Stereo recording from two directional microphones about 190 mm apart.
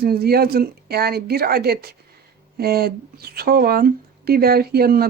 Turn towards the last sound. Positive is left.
turn(degrees=-55)  # may be behind; listen again after turning